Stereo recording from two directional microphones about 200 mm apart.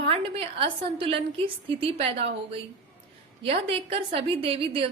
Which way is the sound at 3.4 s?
30° right (ahead or behind).